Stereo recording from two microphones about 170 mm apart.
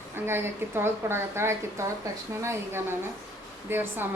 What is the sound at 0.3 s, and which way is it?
A woman's voice, 15° right (ahead or behind).